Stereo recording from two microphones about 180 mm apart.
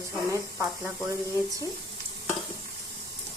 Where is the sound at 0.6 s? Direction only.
10° right (ahead or behind).